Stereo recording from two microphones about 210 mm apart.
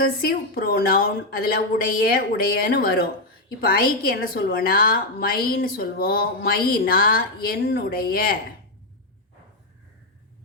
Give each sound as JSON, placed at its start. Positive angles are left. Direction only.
{"t": 0.2, "sound": "a woman's voice", "side_deg": 45}